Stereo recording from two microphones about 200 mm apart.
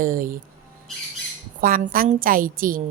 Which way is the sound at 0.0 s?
45° right (ahead or behind).